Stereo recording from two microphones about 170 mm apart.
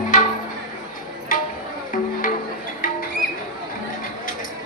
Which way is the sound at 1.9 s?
50° left (ahead or behind).